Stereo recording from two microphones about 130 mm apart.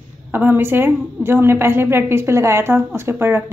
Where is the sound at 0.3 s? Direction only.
15° right (ahead or behind).